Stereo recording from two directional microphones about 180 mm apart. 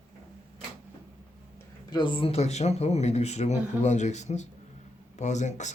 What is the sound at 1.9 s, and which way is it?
Speech, 25° left (ahead or behind).